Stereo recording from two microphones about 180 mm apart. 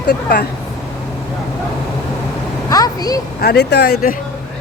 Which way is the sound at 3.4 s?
65° left (ahead or behind).